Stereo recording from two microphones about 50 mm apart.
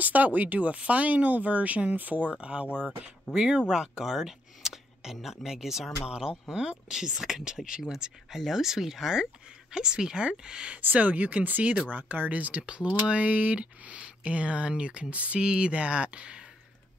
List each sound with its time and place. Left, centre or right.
0.0 s speech: right
2.3 s speech: right
10.8 s speech: right